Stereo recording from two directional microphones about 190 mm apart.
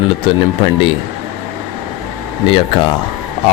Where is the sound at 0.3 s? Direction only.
25° left (ahead or behind).